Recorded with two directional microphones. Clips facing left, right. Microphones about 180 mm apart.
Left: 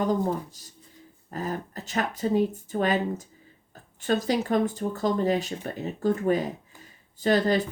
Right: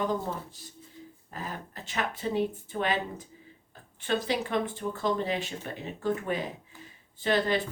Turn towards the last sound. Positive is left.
turn(degrees=40)  # may be behind; listen again after turning